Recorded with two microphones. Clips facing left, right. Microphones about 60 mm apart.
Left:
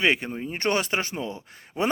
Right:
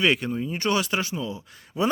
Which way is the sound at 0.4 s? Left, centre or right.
Left.